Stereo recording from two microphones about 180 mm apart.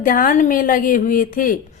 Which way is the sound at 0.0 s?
50° left (ahead or behind).